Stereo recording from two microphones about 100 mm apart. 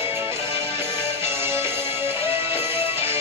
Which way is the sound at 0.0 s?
25° right (ahead or behind).